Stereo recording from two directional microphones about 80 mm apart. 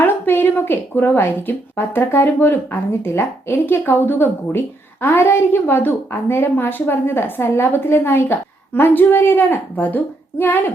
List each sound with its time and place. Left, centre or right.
0.0 s a woman's voice: left